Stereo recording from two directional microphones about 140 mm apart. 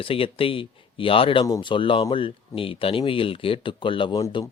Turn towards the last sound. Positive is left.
turn(degrees=25)  # may be behind; listen again after turning